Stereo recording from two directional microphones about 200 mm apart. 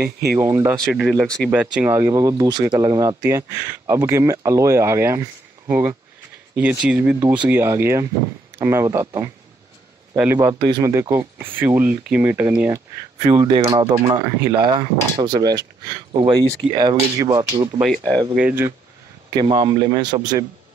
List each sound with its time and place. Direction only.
0.0 s speech: 50° right (ahead or behind)
0.4 s speech: 10° right (ahead or behind)
0.8 s speech: centre (ahead or behind)
7.2 s speech: 20° right (ahead or behind)
19.3 s speech: 20° right (ahead or behind)